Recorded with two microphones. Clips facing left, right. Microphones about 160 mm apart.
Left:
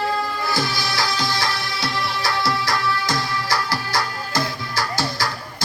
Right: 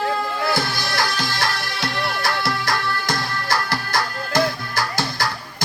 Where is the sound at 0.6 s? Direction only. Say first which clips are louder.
Even; 55° right (ahead or behind).